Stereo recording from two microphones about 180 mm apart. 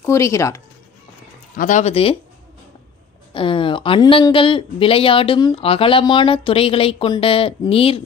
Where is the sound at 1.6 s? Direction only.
45° left (ahead or behind).